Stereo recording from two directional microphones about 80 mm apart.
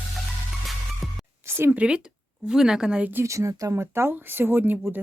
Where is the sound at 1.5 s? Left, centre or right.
Right.